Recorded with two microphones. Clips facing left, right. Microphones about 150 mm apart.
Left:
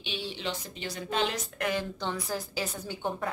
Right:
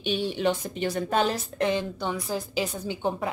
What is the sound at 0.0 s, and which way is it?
A woman's voice, 50° right (ahead or behind).